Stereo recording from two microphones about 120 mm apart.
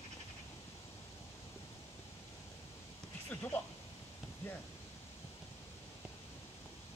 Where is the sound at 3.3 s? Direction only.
15° left (ahead or behind).